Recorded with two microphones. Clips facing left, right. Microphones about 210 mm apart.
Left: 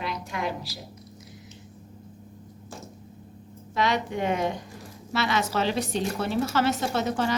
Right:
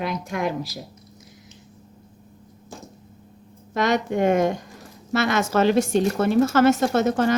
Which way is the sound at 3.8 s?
45° right (ahead or behind).